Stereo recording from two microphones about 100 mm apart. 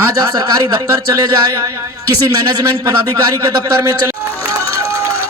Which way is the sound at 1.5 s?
30° right (ahead or behind).